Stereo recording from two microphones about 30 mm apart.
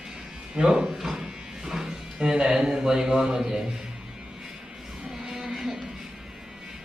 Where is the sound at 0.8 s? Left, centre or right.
Centre.